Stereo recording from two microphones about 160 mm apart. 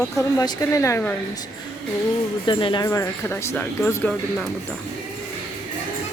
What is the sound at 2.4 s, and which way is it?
Speech, 30° left (ahead or behind).